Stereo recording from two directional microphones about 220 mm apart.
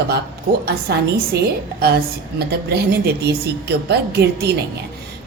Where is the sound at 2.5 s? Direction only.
45° right (ahead or behind).